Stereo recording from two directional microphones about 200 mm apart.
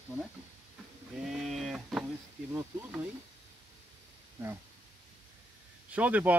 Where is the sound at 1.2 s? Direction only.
Centre (ahead or behind).